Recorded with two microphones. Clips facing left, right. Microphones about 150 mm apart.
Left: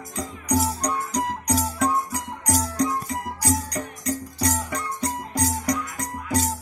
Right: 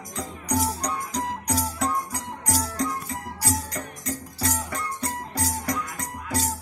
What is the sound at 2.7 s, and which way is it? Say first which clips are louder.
Music: left 4 dB; 15° left (ahead or behind).